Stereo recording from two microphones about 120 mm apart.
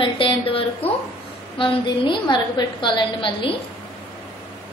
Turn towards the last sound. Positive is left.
turn(degrees=45)  # may be behind; listen again after turning